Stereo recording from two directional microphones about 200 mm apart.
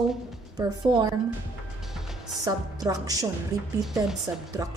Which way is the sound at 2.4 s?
20° right (ahead or behind).